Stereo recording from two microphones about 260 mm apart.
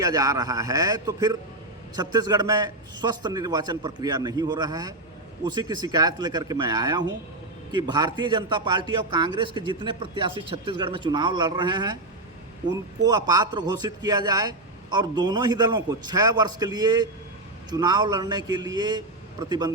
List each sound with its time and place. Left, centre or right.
0.0 s a man's voice: centre
13.2 s a man's voice: centre